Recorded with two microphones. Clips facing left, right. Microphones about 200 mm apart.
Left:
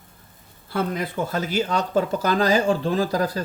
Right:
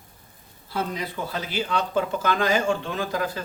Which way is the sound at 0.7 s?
55° left (ahead or behind).